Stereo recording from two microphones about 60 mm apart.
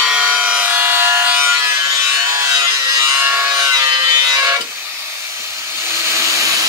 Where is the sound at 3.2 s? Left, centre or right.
Right.